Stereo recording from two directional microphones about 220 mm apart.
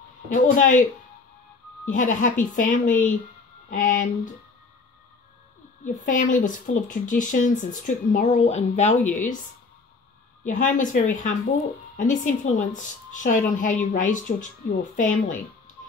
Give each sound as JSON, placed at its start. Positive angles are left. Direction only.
{"t": 0.3, "sound": "a woman's voice", "side_deg": 35}
{"t": 1.9, "sound": "a woman's voice", "side_deg": 35}
{"t": 6.0, "sound": "a woman's voice", "side_deg": 35}
{"t": 10.4, "sound": "a woman's voice", "side_deg": 35}